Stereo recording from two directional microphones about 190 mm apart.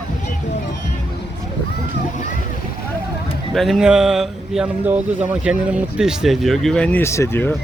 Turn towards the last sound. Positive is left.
turn(degrees=10)  # may be behind; listen again after turning